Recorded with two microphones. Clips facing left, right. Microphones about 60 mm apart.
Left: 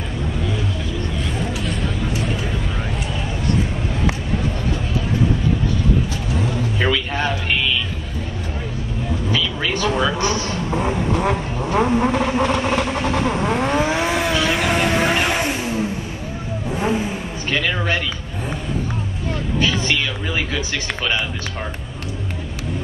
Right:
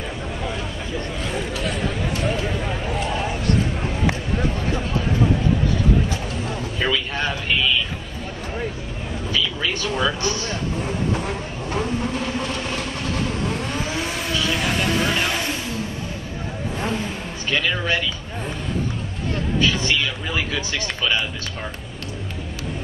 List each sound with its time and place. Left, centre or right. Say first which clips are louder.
9.3 s vehicle: left 1 dB; left; by 17.1 s centre